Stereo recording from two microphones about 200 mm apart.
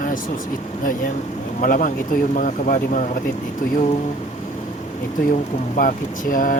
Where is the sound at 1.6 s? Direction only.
40° left (ahead or behind).